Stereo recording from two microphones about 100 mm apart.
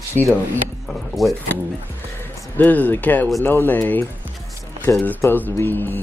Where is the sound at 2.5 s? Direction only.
15° left (ahead or behind).